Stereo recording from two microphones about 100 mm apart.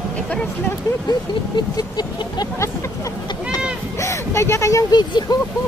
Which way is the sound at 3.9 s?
30° left (ahead or behind).